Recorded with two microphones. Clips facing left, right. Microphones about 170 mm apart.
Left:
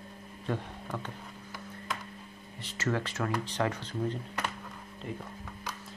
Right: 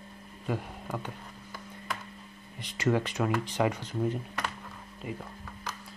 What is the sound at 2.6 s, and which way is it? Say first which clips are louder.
Speech: right 4 dB; 15° right (ahead or behind).